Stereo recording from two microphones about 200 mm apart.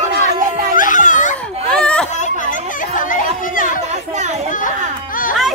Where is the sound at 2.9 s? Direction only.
40° left (ahead or behind).